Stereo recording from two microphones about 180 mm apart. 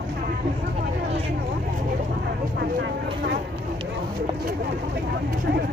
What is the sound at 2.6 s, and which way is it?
Vehicle, 65° right (ahead or behind).